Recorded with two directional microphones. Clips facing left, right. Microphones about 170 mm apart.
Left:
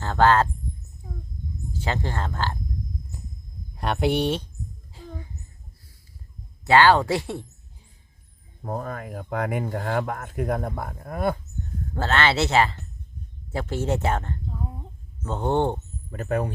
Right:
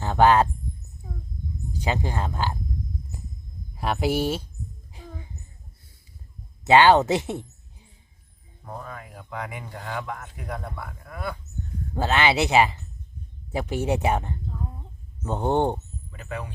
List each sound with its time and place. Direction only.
0.0 s speech: 15° right (ahead or behind)
1.7 s speech: 15° right (ahead or behind)
3.8 s speech: centre (ahead or behind)
4.9 s a sound: 15° right (ahead or behind)
6.7 s speech: 20° right (ahead or behind)
8.6 s speech: 50° left (ahead or behind)
11.9 s speech: 15° right (ahead or behind)
16.0 s speech: 45° left (ahead or behind)